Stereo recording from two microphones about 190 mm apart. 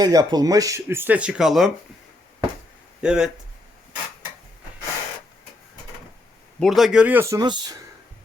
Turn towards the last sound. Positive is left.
turn(degrees=-25)  # may be behind; listen again after turning